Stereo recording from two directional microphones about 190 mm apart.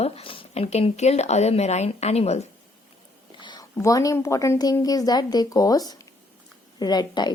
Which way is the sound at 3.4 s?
20° left (ahead or behind).